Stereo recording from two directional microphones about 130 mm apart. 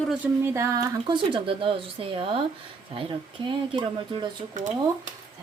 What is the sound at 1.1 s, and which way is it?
Speech, 40° right (ahead or behind).